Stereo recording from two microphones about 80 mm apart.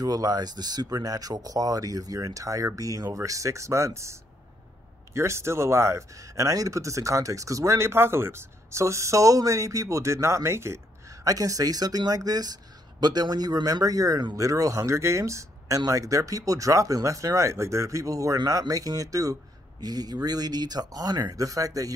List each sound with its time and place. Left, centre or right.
0.0 s speech: right